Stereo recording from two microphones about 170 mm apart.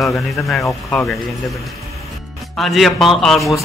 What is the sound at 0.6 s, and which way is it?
Speech, 15° left (ahead or behind).